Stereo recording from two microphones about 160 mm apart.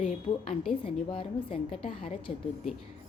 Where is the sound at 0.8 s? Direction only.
35° left (ahead or behind).